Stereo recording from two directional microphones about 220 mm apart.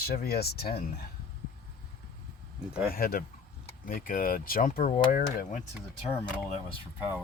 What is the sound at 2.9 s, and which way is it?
Speech, 40° left (ahead or behind).